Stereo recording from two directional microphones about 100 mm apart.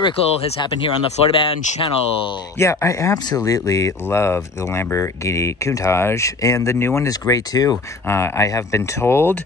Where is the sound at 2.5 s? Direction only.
30° left (ahead or behind).